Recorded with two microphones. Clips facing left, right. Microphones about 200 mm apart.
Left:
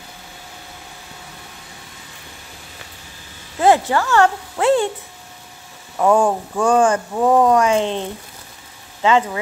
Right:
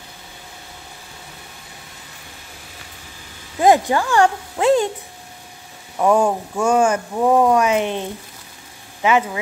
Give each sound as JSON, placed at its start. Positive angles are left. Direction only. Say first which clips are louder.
{"t": 3.6, "sound": "speech", "louder": "even", "side_deg": -15}
{"t": 5.9, "sound": "speech", "louder": "left 1 dB", "side_deg": -10}
{"t": 9.0, "sound": "speech", "louder": "left 1 dB", "side_deg": -15}